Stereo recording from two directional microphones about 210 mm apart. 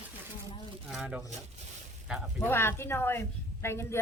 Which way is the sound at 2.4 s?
10° left (ahead or behind).